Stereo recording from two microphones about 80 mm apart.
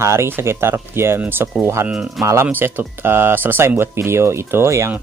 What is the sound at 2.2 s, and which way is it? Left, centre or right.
Speech, right.